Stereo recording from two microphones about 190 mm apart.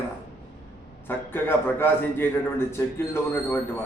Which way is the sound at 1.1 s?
10° left (ahead or behind).